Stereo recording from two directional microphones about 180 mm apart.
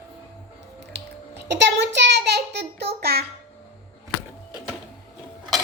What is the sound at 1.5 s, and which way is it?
Child singing, 75° right (ahead or behind).